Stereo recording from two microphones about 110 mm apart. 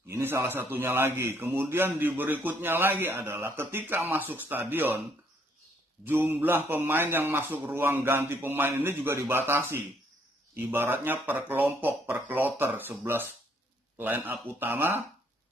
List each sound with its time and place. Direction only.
0.1 s a man's voice: 25° right (ahead or behind)
6.0 s a man's voice: 20° right (ahead or behind)